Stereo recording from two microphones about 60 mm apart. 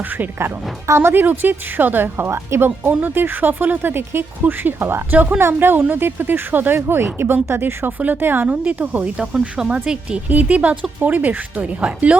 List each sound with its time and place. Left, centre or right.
0.9 s speech: right
1.2 s speech: right
2.6 s speech: right
5.1 s speech: right
5.4 s speech: right
8.4 s speech: right